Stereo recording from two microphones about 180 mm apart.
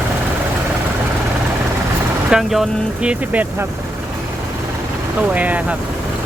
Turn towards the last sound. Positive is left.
turn(degrees=-10)  # may be behind; listen again after turning